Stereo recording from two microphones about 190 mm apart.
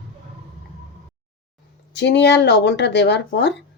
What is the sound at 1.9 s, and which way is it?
Speech, 65° left (ahead or behind).